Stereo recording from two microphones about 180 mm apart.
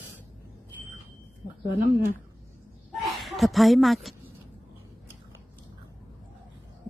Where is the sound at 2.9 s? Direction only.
Centre (ahead or behind).